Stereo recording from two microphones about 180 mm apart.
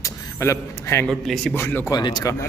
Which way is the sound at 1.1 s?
5° left (ahead or behind).